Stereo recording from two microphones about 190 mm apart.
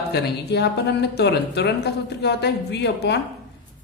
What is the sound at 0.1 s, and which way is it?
A woman's voice, 60° left (ahead or behind).